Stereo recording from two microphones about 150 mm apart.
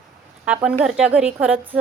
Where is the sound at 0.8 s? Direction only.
5° right (ahead or behind).